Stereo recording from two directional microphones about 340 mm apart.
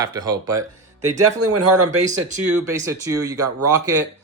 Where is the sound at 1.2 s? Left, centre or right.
Right.